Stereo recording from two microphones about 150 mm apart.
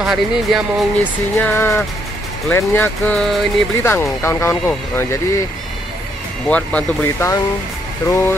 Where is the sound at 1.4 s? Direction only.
15° left (ahead or behind).